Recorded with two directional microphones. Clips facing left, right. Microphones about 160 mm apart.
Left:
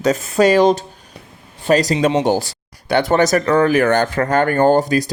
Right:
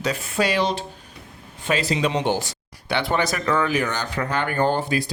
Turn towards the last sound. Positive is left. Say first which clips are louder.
# left 8 dB
turn(degrees=40)  # may be behind; listen again after turning